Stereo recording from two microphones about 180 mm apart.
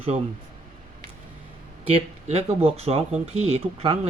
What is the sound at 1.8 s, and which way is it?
Speech, 30° right (ahead or behind).